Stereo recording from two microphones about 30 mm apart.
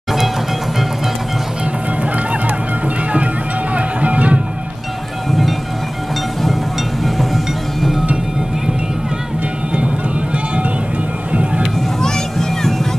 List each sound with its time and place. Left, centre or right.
3.7 s music: right
6.4 s music: centre
12.0 s a sound: centre